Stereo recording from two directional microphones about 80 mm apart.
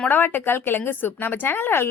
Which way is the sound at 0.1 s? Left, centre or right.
Left.